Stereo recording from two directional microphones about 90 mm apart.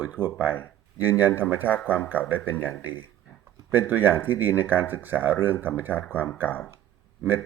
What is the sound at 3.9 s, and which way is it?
Speech, 20° right (ahead or behind).